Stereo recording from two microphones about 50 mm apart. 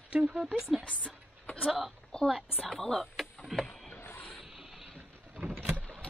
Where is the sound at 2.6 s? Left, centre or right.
Centre.